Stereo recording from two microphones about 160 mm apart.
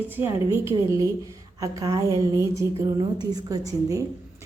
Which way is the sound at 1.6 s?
20° right (ahead or behind).